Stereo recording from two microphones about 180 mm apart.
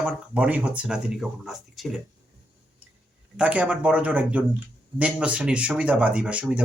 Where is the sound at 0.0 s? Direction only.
5° right (ahead or behind).